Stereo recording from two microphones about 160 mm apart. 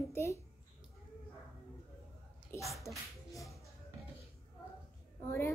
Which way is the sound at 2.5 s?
15° left (ahead or behind).